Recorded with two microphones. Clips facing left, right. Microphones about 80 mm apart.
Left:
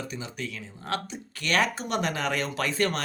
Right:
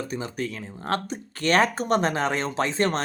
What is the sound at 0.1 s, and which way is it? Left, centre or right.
Speech, right.